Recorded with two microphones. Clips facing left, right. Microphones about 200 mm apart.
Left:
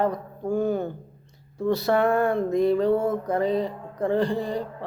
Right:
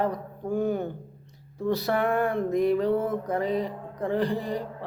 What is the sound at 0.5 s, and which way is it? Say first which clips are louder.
Speech: left 2 dB; 15° right (ahead or behind).